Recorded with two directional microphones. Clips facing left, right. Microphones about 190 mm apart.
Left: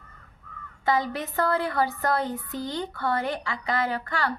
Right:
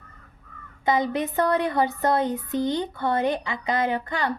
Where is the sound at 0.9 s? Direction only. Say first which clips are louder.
Right 3 dB; 20° right (ahead or behind).